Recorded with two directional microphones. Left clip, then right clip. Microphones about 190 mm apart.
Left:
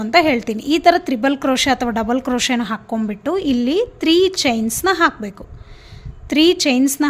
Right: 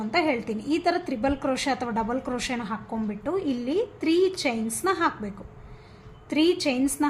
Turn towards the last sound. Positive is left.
turn(degrees=50)  # may be behind; listen again after turning